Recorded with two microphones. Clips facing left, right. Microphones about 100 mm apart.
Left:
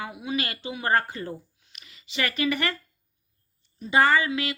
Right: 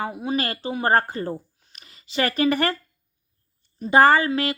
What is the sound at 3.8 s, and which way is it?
Speech, 45° right (ahead or behind).